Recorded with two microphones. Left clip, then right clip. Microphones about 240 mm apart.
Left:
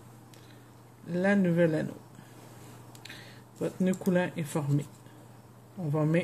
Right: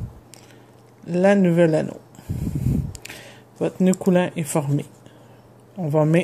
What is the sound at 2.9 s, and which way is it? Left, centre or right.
Speech, right.